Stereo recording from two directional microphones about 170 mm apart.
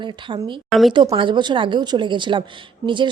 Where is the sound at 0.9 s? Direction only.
30° right (ahead or behind).